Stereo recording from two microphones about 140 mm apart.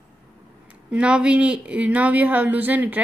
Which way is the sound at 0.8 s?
10° right (ahead or behind).